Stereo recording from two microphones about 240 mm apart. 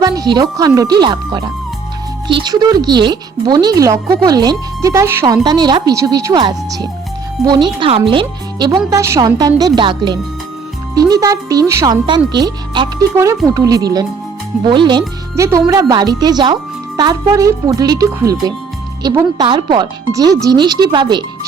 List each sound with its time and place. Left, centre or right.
0.0 s speech: centre